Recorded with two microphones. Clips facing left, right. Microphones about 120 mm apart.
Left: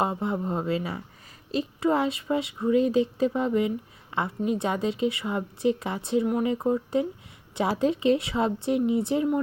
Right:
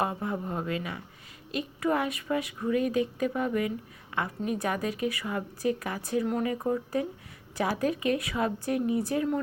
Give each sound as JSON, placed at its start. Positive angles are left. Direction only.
{"t": 0.0, "sound": "speech", "side_deg": 25}